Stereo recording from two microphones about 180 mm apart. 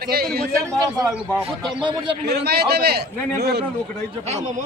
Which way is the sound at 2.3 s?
60° right (ahead or behind).